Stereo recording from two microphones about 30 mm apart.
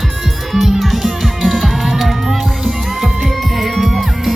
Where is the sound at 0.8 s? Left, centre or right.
Centre.